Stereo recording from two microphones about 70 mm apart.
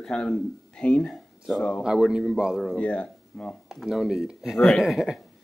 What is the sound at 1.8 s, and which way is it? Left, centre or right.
Speech, centre.